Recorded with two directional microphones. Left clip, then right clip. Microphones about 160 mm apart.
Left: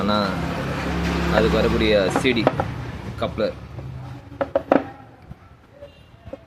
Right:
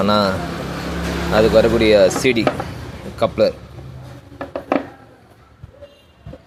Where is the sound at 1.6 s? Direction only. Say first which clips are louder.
Right 7 dB; 45° right (ahead or behind).